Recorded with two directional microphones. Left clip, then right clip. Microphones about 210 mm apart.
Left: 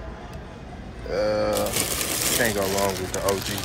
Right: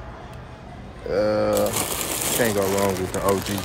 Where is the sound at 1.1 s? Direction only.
25° right (ahead or behind).